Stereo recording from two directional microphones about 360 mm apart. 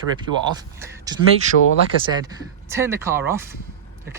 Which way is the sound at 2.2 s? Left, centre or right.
Centre.